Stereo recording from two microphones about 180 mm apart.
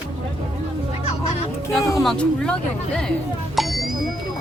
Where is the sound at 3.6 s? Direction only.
Centre (ahead or behind).